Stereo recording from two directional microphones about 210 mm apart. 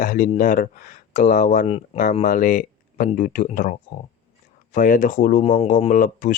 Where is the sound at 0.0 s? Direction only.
35° left (ahead or behind).